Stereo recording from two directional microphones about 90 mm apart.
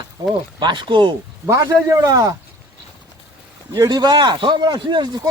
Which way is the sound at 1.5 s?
35° right (ahead or behind).